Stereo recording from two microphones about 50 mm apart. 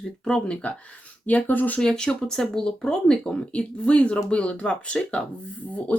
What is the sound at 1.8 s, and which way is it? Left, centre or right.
Speech, centre.